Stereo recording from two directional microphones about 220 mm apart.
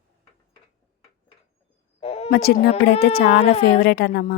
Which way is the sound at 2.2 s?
45° left (ahead or behind).